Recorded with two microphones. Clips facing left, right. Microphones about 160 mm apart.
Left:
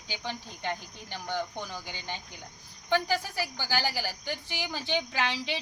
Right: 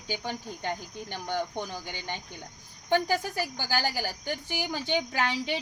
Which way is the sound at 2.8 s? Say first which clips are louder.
Right 2 dB; 50° right (ahead or behind).